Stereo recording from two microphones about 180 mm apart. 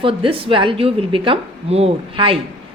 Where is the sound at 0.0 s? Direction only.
30° right (ahead or behind).